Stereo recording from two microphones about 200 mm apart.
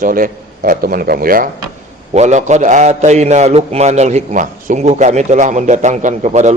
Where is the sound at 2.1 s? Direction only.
35° right (ahead or behind).